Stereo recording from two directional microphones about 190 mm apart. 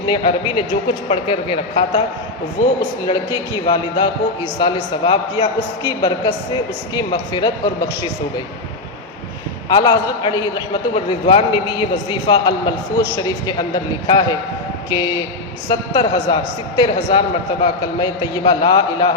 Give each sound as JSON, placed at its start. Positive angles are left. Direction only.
{"t": 0.1, "sound": "a man's voice", "side_deg": 25}
{"t": 3.1, "sound": "a man's voice", "side_deg": 20}
{"t": 9.6, "sound": "a man's voice", "side_deg": 20}
{"t": 15.7, "sound": "a man's voice", "side_deg": 25}